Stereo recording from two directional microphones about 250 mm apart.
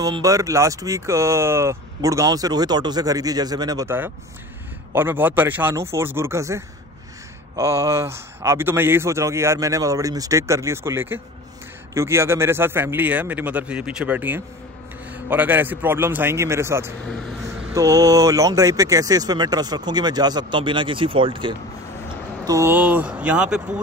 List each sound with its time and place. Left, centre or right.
0.0 s speech: centre